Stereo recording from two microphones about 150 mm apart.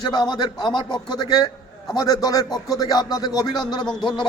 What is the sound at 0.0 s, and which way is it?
A man's voice, 30° left (ahead or behind).